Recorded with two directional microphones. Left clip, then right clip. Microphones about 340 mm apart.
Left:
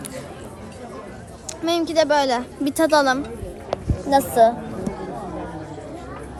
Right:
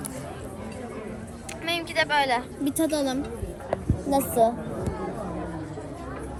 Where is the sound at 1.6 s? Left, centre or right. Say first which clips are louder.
Left 7 dB; centre.